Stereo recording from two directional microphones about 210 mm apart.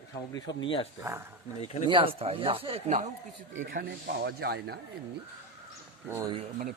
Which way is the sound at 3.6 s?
40° right (ahead or behind).